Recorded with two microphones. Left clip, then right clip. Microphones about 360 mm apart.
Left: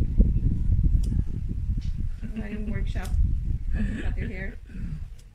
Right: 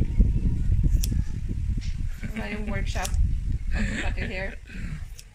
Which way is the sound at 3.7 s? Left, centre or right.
Right.